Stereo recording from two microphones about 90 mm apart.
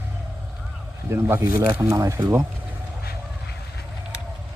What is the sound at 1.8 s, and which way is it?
Speech, 35° right (ahead or behind).